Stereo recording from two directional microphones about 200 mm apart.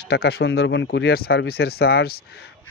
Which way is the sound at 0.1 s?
55° left (ahead or behind).